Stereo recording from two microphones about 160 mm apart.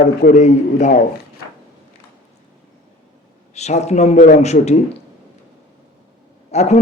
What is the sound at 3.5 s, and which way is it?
A man's voice, 45° left (ahead or behind).